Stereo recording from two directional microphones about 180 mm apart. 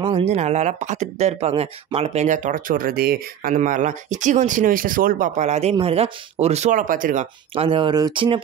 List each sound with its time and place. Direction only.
0.2 s speech: 40° right (ahead or behind)
7.5 s speech: 30° right (ahead or behind)